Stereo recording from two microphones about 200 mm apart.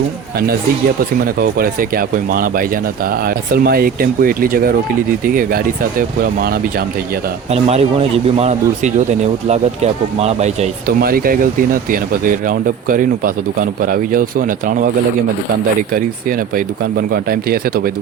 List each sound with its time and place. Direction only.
1.4 s speech: 45° right (ahead or behind)
7.5 s speech: 30° right (ahead or behind)
10.8 s speech: 45° right (ahead or behind)
17.1 s speech: 50° right (ahead or behind)